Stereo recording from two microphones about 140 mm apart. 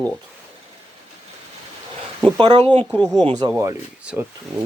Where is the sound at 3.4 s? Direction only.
25° right (ahead or behind).